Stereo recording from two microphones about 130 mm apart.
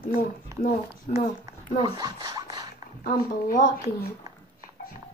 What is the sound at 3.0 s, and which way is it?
Speech, 90° left.